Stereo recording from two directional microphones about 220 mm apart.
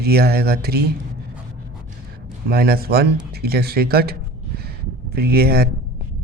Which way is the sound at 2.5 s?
45° right (ahead or behind).